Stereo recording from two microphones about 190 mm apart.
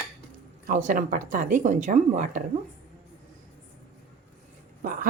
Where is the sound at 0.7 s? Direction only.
45° right (ahead or behind).